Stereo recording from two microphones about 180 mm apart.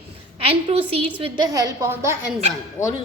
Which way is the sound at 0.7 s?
30° right (ahead or behind).